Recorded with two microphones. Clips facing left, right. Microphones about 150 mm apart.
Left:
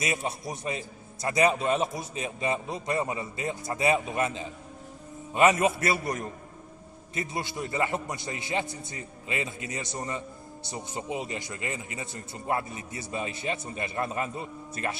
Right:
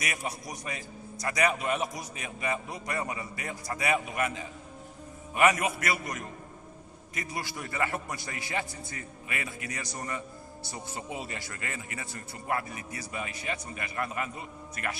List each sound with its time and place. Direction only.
0.0 s a man's voice: 25° left (ahead or behind)